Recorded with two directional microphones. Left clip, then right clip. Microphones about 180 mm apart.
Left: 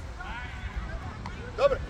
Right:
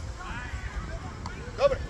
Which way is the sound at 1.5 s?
60° left (ahead or behind).